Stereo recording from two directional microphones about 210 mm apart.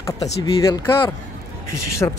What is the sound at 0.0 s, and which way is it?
Speech, 20° left (ahead or behind).